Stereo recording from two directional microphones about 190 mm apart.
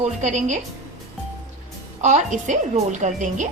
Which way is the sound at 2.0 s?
40° right (ahead or behind).